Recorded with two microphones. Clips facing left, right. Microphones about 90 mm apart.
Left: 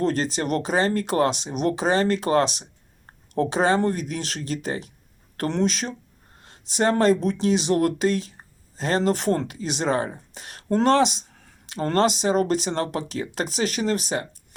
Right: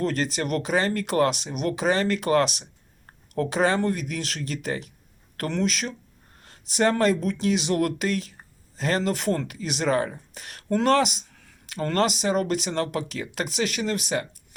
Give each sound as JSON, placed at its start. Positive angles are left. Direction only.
{"t": 0.0, "sound": "speech", "side_deg": 35}